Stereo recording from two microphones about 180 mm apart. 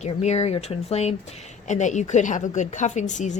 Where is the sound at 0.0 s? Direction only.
40° left (ahead or behind).